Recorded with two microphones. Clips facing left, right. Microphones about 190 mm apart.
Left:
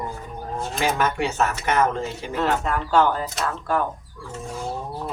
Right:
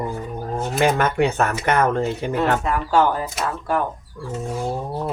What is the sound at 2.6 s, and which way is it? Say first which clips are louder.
Speech: right 1 dB; 10° right (ahead or behind).